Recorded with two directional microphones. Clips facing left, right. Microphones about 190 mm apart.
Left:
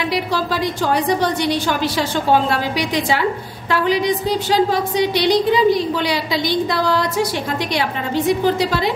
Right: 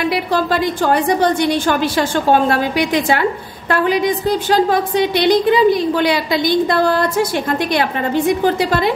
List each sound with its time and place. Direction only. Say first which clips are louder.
0.1 s a woman's voice: right 3 dB; 55° right (ahead or behind)
8.5 s a woman's voice: right 3 dB; 50° right (ahead or behind)